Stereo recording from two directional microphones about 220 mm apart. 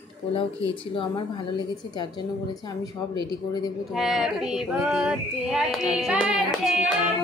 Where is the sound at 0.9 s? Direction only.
20° left (ahead or behind).